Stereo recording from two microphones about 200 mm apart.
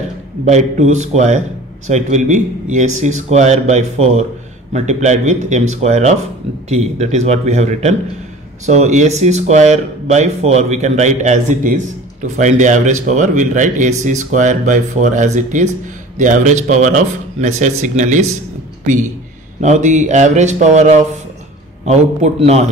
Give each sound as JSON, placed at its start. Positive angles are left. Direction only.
{"t": 0.5, "sound": "speech", "side_deg": -35}
{"t": 19.6, "sound": "speech", "side_deg": -35}